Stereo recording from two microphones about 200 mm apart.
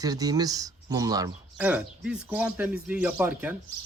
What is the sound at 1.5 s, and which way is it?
Speech, 5° right (ahead or behind).